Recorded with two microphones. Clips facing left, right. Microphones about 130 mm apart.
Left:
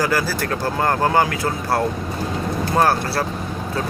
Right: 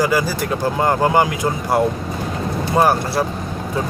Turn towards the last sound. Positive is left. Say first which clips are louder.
# right 2 dB
turn(degrees=-15)  # may be behind; listen again after turning